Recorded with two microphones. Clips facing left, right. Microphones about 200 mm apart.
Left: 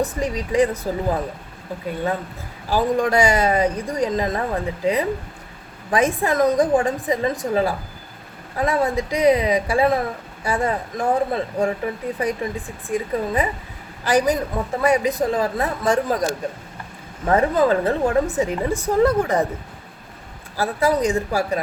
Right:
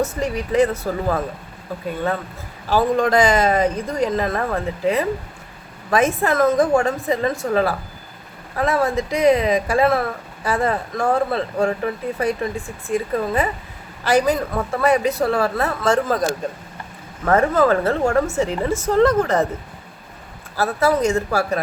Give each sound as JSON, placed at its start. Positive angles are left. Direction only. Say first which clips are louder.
{"t": 0.0, "sound": "speech", "louder": "right 1 dB", "side_deg": 15}
{"t": 2.6, "sound": "speech", "louder": "right 2 dB", "side_deg": 15}
{"t": 17.2, "sound": "speech", "louder": "right 1 dB", "side_deg": 15}
{"t": 20.6, "sound": "speech", "louder": "right 1 dB", "side_deg": 15}